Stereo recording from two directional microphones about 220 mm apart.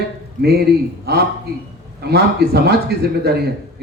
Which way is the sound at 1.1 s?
45° right (ahead or behind).